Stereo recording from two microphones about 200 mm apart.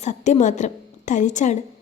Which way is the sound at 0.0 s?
35° left (ahead or behind).